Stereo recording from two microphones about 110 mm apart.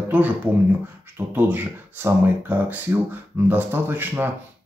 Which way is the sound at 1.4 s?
20° right (ahead or behind).